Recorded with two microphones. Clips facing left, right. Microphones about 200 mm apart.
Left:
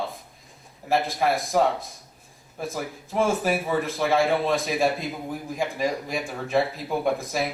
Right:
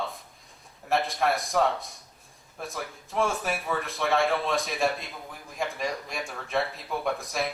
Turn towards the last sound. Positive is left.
turn(degrees=0)  # may be behind; listen again after turning